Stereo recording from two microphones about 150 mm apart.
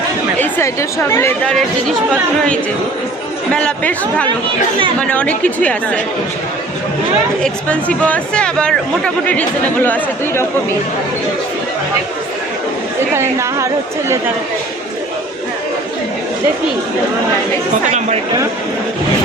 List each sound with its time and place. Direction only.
0.4 s speech: 15° left (ahead or behind)
3.5 s speech: 5° left (ahead or behind)
7.4 s speech: 10° left (ahead or behind)
13.1 s a woman's voice: 20° right (ahead or behind)